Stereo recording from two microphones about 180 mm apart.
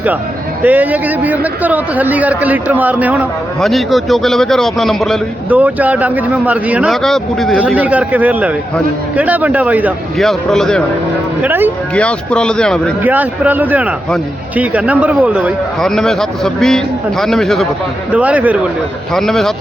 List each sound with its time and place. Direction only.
0.6 s a man's voice: 10° right (ahead or behind)
5.5 s a man's voice: 10° right (ahead or behind)
7.8 s a man's voice: 10° right (ahead or behind)
10.2 s a man's voice: centre (ahead or behind)
11.4 s a man's voice: 10° right (ahead or behind)
11.9 s a man's voice: 5° left (ahead or behind)
13.0 s a man's voice: 10° right (ahead or behind)